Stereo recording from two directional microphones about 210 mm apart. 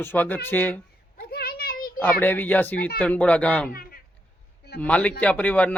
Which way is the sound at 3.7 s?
45° left (ahead or behind).